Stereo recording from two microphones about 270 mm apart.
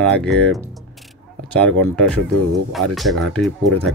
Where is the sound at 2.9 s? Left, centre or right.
Centre.